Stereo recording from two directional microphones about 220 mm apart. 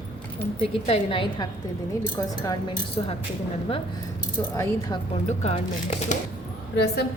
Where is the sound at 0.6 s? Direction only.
25° left (ahead or behind).